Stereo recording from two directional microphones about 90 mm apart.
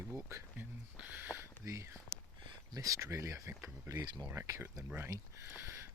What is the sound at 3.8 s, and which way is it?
Speech, 55° right (ahead or behind).